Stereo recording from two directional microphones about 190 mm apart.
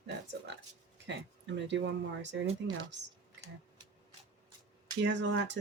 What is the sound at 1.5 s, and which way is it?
Speech, 70° right (ahead or behind).